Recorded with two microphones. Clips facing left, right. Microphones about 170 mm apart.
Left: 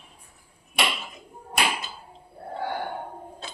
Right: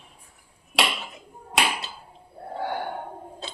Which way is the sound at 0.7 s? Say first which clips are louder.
Right 2 dB; 90° right.